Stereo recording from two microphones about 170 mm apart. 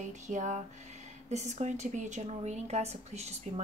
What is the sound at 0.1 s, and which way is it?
Speech, 45° right (ahead or behind).